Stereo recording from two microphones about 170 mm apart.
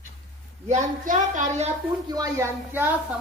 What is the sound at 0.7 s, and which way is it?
Speech, 45° right (ahead or behind).